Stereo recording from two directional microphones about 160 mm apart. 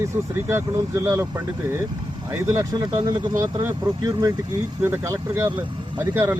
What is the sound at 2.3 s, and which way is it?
Speech, 15° right (ahead or behind).